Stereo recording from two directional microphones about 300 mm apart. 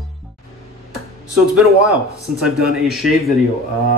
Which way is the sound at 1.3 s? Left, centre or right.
Right.